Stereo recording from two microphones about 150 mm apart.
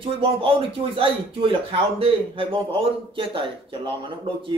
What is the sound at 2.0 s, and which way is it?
Speech, 35° right (ahead or behind).